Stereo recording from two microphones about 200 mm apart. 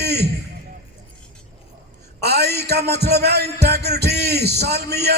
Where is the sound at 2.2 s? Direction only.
55° right (ahead or behind).